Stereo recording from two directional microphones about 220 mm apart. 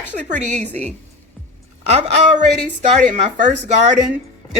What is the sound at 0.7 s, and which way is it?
Speech, 5° left (ahead or behind).